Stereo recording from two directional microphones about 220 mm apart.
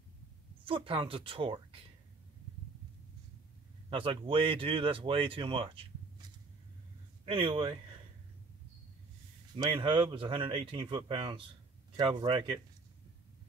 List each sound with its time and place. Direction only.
0.7 s speech: 25° right (ahead or behind)
3.9 s speech: 25° right (ahead or behind)
7.2 s speech: 25° right (ahead or behind)
9.6 s speech: 20° right (ahead or behind)